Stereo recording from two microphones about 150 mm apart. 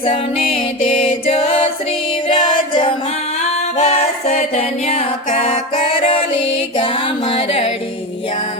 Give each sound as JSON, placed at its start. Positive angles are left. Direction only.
{"t": 0.0, "sound": "music", "side_deg": 40}
{"t": 3.8, "sound": "music", "side_deg": 45}